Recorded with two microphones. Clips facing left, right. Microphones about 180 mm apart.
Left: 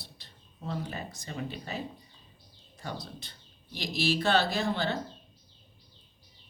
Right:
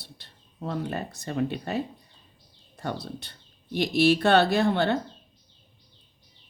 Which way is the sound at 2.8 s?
65° right (ahead or behind).